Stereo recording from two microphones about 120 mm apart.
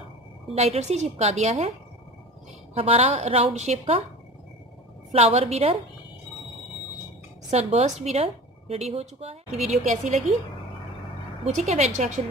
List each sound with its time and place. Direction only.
0.6 s a woman's voice: 65° right (ahead or behind)
2.7 s a woman's voice: 55° right (ahead or behind)
5.1 s a woman's voice: 60° right (ahead or behind)
7.5 s a woman's voice: 60° right (ahead or behind)
9.7 s a woman's voice: 70° right (ahead or behind)
11.4 s a woman's voice: 70° right (ahead or behind)